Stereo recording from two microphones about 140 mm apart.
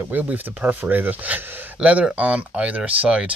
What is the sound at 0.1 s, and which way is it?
Speech, 10° right (ahead or behind).